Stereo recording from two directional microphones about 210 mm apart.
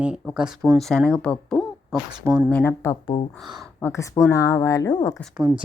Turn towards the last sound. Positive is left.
turn(degrees=-10)  # may be behind; listen again after turning